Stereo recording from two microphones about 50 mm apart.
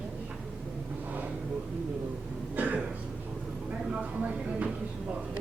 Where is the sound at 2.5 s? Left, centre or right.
Right.